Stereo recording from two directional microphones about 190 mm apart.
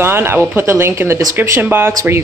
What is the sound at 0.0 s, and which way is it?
Speech, 10° right (ahead or behind).